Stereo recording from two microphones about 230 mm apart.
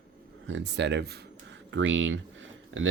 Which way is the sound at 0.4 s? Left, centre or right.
Right.